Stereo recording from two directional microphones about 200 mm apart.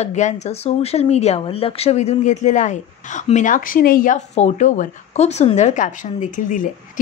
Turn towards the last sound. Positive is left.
turn(degrees=40)  # may be behind; listen again after turning